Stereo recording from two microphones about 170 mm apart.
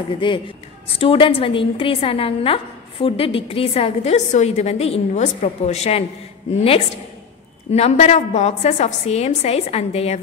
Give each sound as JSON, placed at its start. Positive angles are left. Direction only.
{"t": 0.2, "sound": "a woman's voice", "side_deg": 30}
{"t": 7.7, "sound": "a woman's voice", "side_deg": 40}